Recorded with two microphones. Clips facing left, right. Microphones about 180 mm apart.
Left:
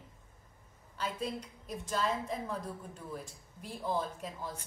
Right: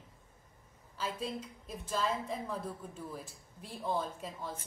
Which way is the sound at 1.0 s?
Centre (ahead or behind).